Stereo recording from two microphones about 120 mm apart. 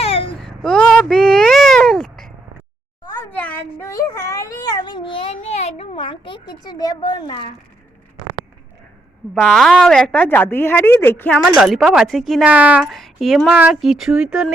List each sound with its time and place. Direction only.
0.0 s a sound: 55° left (ahead or behind)
0.4 s a sound: 5° left (ahead or behind); by 7.5 s 40° left (ahead or behind)
9.3 s a woman's voice: 5° left (ahead or behind)
11.4 s a woman's voice: 5° right (ahead or behind)
12.5 s speech: 10° right (ahead or behind)
12.8 s a woman's voice: centre (ahead or behind)